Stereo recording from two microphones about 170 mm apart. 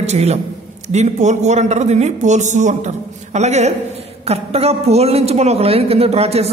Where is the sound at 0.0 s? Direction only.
40° right (ahead or behind).